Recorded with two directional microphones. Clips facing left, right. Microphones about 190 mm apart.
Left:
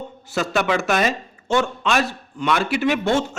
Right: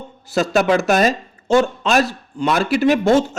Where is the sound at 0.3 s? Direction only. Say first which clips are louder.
Right 5 dB; 35° right (ahead or behind).